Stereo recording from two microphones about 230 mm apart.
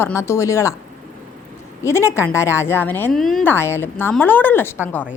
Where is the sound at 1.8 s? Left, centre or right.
Centre.